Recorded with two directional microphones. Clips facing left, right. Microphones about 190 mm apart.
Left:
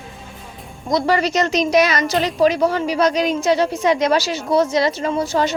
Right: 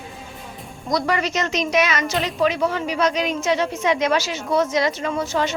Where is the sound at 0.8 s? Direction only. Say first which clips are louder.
Left 4 dB; 25° left (ahead or behind).